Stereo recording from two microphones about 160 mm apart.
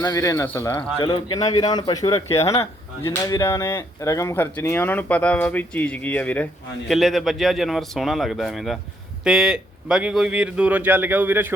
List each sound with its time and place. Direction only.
0.0 s a man's voice: 20° left (ahead or behind); by 11.5 s 15° right (ahead or behind)